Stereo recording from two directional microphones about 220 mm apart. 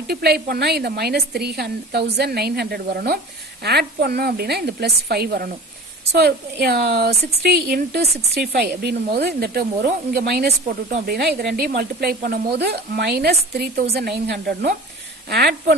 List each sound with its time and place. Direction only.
0.1 s a woman's voice: 45° right (ahead or behind)